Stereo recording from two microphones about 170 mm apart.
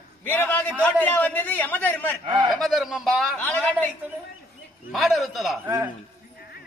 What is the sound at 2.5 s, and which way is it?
A man's voice, centre (ahead or behind).